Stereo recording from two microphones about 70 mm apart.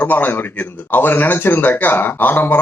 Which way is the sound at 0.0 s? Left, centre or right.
Left.